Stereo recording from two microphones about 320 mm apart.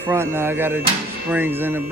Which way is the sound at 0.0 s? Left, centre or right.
Centre.